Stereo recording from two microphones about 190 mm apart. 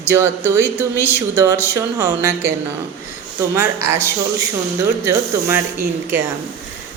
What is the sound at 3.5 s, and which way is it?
Speech, 15° right (ahead or behind).